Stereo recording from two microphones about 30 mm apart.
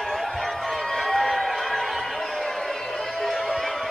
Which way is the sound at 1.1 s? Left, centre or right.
Centre.